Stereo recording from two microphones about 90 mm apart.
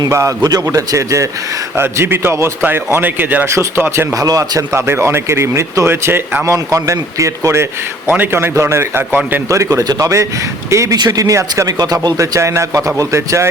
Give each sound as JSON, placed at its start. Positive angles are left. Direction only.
{"t": 0.1, "sound": "speech", "side_deg": -35}
{"t": 0.4, "sound": "a man's voice", "side_deg": -45}
{"t": 4.1, "sound": "speech", "side_deg": -45}
{"t": 4.7, "sound": "a man's voice", "side_deg": -30}
{"t": 6.5, "sound": "a man's voice", "side_deg": -35}
{"t": 9.5, "sound": "speech", "side_deg": -35}
{"t": 9.8, "sound": "speech", "side_deg": -50}
{"t": 10.7, "sound": "speech", "side_deg": -35}
{"t": 10.9, "sound": "speech", "side_deg": -45}